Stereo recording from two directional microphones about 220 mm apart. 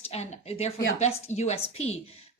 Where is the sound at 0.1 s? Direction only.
30° left (ahead or behind).